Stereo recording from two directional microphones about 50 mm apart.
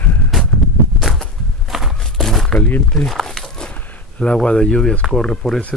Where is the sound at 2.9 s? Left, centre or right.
Centre.